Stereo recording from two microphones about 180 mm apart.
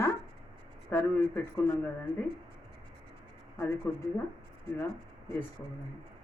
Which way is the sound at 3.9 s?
15° left (ahead or behind).